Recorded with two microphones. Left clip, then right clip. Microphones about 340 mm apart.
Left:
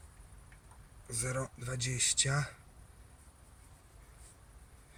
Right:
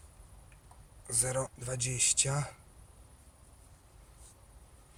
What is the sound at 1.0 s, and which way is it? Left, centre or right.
Speech, right.